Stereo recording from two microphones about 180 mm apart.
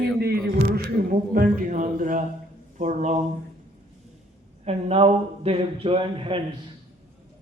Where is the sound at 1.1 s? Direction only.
50° right (ahead or behind).